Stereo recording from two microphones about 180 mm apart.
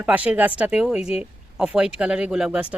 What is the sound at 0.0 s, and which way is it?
A woman's voice, 10° right (ahead or behind).